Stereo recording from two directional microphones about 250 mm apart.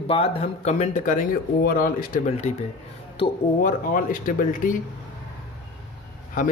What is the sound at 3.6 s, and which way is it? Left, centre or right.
A man's voice, left.